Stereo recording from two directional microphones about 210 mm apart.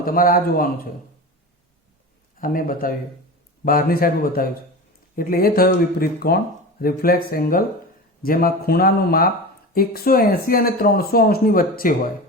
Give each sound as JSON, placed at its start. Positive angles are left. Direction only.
{"t": 0.0, "sound": "speech", "side_deg": 45}
{"t": 2.4, "sound": "speech", "side_deg": 40}